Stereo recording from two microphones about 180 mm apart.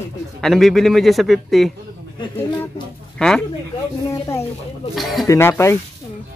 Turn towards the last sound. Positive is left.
turn(degrees=15)  # may be behind; listen again after turning